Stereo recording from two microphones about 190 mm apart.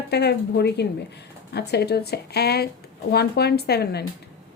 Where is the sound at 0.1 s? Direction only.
60° left (ahead or behind).